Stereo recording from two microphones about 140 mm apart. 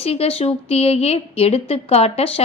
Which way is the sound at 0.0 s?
45° left (ahead or behind).